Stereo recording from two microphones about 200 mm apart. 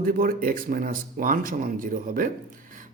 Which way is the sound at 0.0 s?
45° right (ahead or behind).